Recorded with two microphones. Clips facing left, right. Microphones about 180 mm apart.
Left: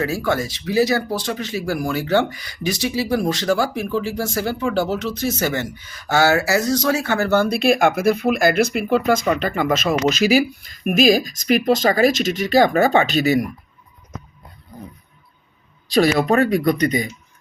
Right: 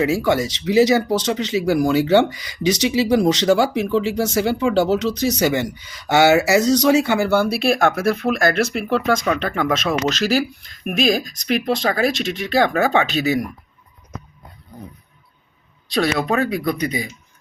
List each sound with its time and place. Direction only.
0.0 s speech: 20° right (ahead or behind); by 13.4 s centre (ahead or behind)
15.9 s speech: centre (ahead or behind)